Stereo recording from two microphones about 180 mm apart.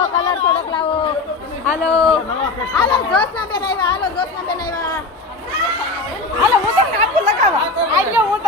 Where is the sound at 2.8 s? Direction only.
25° left (ahead or behind).